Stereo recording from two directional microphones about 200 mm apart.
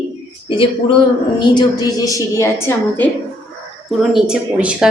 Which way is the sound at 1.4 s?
20° left (ahead or behind).